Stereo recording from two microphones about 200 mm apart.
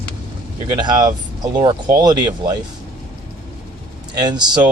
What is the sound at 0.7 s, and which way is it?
Speech, 20° right (ahead or behind).